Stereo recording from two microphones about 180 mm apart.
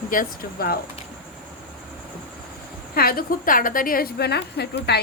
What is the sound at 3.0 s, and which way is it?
A woman's voice, 55° left (ahead or behind).